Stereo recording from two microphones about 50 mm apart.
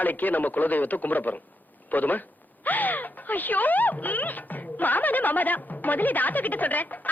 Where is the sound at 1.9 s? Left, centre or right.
Left.